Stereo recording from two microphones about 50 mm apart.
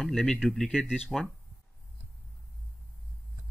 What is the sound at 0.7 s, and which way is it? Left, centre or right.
Speech, centre.